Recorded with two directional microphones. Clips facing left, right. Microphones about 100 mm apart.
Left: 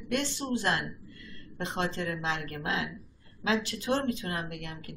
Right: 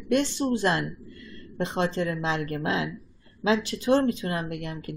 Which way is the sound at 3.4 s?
25° right (ahead or behind).